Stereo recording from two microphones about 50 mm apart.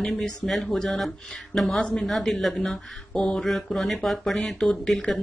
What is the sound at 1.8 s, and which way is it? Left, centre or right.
Speech, centre.